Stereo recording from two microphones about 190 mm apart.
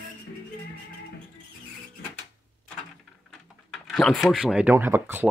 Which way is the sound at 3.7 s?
5° left (ahead or behind).